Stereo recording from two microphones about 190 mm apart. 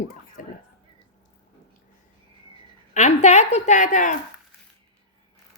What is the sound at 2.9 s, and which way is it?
A woman's voice, 35° left (ahead or behind).